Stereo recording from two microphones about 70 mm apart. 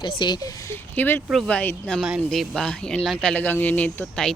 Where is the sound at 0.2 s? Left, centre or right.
Left.